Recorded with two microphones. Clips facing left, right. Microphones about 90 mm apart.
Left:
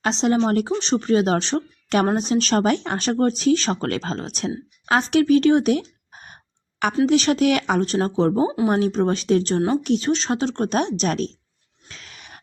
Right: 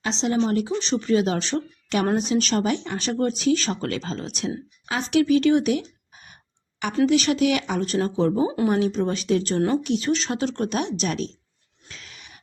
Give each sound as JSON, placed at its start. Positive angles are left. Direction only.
{"t": 0.0, "sound": "speech", "side_deg": 50}
{"t": 0.8, "sound": "a woman's voice", "side_deg": 40}
{"t": 2.6, "sound": "speech", "side_deg": 55}
{"t": 3.0, "sound": "speech", "side_deg": 45}
{"t": 4.9, "sound": "a sound", "side_deg": 45}
{"t": 7.0, "sound": "speech", "side_deg": 35}
{"t": 7.9, "sound": "speech", "side_deg": 30}
{"t": 10.1, "sound": "speech", "side_deg": 25}
{"t": 11.9, "sound": "a sound", "side_deg": 40}